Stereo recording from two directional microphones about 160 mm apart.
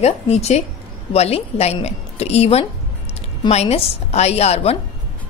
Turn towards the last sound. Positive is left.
turn(degrees=40)  # may be behind; listen again after turning